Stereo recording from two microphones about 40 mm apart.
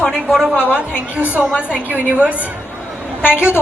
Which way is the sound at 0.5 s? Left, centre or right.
Right.